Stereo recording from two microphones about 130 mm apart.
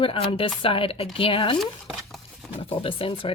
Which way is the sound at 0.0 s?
45° left (ahead or behind).